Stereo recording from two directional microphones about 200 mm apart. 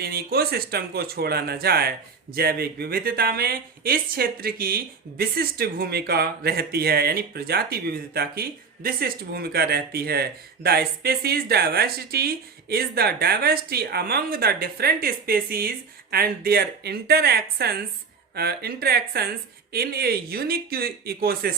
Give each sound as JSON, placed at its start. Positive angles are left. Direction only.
{"t": 0.0, "sound": "speech", "side_deg": -50}